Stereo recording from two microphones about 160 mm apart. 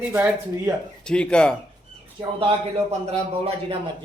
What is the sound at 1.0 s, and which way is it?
Speech, 5° left (ahead or behind).